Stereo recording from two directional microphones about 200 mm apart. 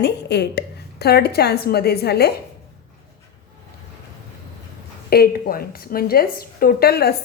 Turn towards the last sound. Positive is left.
turn(degrees=50)  # may be behind; listen again after turning